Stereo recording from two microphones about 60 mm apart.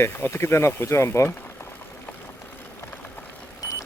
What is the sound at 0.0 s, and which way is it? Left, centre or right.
Speech, left.